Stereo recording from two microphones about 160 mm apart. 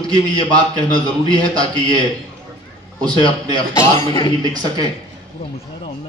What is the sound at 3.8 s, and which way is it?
Speech, 15° left (ahead or behind).